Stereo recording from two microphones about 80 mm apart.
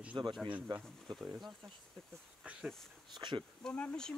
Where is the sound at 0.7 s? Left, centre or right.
Right.